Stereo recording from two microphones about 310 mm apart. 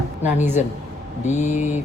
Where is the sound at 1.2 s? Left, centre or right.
Left.